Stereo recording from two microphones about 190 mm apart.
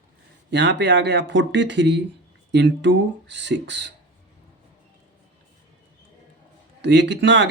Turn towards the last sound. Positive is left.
turn(degrees=-70)  # may be behind; listen again after turning